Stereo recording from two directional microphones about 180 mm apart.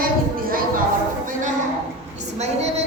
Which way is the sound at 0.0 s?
55° right (ahead or behind).